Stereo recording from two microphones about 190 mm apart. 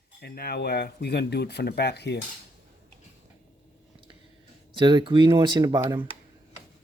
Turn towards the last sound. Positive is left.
turn(degrees=-20)  # may be behind; listen again after turning